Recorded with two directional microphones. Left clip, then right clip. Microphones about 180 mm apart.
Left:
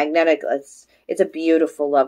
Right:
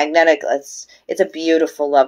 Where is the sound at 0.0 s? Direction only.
15° left (ahead or behind).